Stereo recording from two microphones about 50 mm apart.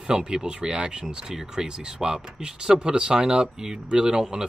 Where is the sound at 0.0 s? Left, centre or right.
Centre.